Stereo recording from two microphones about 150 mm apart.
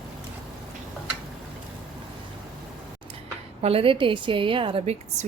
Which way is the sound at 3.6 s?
40° right (ahead or behind).